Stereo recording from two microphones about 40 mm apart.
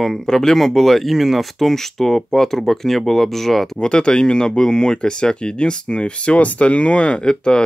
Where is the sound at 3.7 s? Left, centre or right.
Left.